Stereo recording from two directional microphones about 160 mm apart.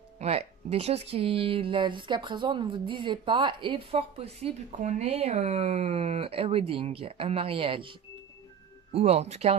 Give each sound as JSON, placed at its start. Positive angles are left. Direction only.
{"t": 0.2, "sound": "speech", "side_deg": -40}
{"t": 8.9, "sound": "speech", "side_deg": -40}